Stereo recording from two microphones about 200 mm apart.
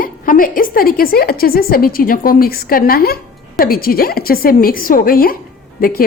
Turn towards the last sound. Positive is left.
turn(degrees=45)  # may be behind; listen again after turning